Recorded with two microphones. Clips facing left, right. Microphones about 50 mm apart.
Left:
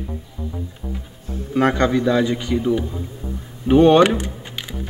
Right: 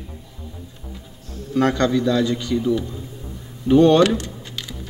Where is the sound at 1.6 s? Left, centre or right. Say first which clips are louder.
Left 1 dB; left.